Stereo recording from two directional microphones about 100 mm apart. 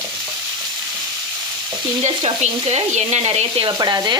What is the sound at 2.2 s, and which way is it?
Sizzle, 85° right.